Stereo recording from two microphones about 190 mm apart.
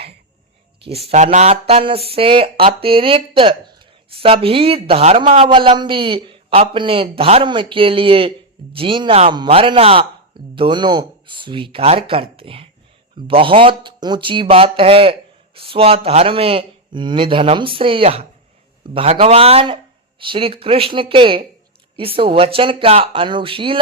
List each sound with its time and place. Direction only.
0.9 s speech: 30° right (ahead or behind)